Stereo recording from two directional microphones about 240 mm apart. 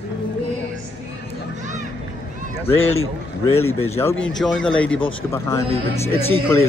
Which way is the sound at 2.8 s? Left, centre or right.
Left.